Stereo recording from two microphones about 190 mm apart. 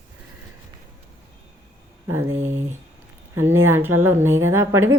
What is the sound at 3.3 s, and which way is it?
Speech, 90° right.